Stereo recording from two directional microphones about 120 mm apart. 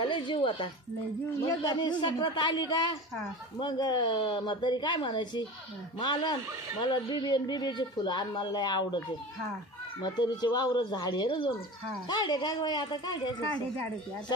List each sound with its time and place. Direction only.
0.0 s a woman's voice: 40° left (ahead or behind)
10.0 s speech: 35° left (ahead or behind)